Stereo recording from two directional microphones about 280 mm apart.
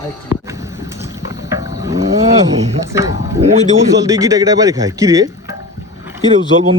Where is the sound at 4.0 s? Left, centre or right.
Centre.